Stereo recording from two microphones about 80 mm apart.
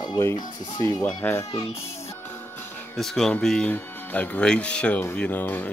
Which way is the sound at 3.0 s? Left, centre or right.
Centre.